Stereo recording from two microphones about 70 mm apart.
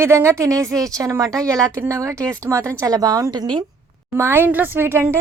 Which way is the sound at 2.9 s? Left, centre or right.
Right.